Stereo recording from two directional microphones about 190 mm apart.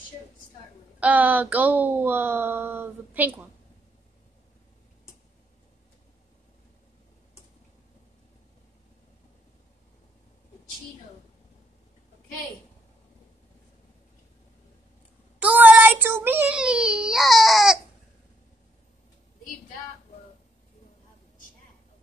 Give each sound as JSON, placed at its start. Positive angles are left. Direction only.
{"t": 0.9, "sound": "a woman's voice", "side_deg": -10}
{"t": 15.3, "sound": "a child's voice", "side_deg": -10}